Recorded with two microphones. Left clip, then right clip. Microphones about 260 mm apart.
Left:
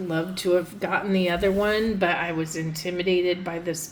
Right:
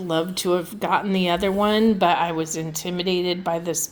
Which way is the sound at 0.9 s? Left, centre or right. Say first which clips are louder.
Right 2 dB; right.